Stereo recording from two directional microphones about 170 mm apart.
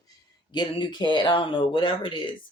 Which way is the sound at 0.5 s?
25° left (ahead or behind).